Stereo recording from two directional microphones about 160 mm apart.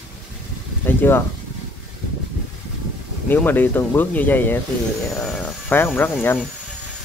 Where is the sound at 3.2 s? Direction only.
10° left (ahead or behind).